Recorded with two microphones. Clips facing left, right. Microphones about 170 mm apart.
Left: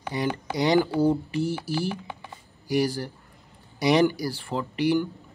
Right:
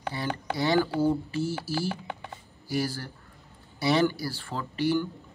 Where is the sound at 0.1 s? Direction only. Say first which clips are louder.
Left 5 dB; 15° left (ahead or behind).